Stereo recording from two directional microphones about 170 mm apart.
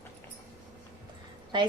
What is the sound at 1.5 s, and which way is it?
Speech, 25° right (ahead or behind).